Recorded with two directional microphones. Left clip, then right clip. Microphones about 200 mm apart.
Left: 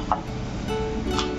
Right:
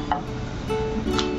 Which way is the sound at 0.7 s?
Centre (ahead or behind).